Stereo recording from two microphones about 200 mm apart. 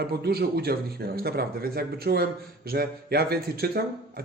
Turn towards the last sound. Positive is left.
turn(degrees=-50)  # may be behind; listen again after turning